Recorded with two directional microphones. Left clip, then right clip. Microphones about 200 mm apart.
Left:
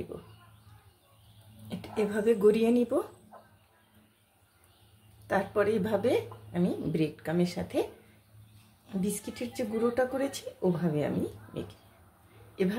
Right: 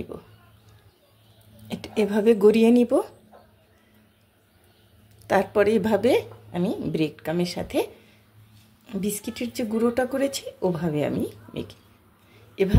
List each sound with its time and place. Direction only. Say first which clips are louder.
1.7 s speech: right 7 dB; 25° right (ahead or behind)
5.2 s speech: right 7 dB; 30° right (ahead or behind)
6.5 s a woman's voice: right 5 dB; 20° right (ahead or behind)
8.8 s a woman's voice: right 5 dB; 25° right (ahead or behind)